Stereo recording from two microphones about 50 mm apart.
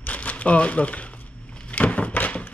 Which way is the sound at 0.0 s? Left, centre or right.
Left.